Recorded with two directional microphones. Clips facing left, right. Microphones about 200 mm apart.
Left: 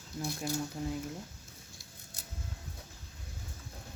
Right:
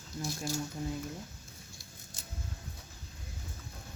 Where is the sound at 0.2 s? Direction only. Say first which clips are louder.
Left 1 dB; 60° left (ahead or behind).